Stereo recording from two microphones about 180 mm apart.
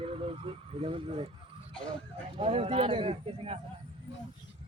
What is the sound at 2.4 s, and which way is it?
Speech, 35° right (ahead or behind).